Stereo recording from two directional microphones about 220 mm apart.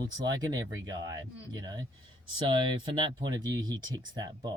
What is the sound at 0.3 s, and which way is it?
Speech, 15° right (ahead or behind).